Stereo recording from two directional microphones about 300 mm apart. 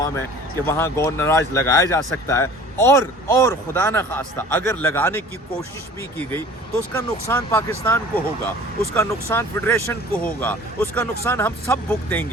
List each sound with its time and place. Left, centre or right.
0.6 s speech: centre